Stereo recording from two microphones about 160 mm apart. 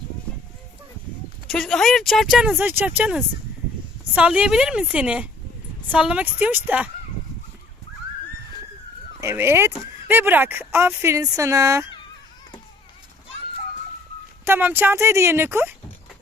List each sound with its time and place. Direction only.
1.5 s speech: centre (ahead or behind)
9.2 s speech: 15° right (ahead or behind)
14.4 s speech: 15° right (ahead or behind)